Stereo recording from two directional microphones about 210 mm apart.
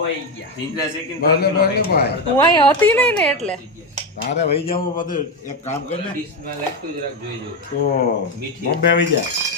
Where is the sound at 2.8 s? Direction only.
5° left (ahead or behind).